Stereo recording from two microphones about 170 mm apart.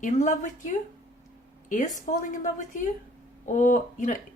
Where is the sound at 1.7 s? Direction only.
50° left (ahead or behind).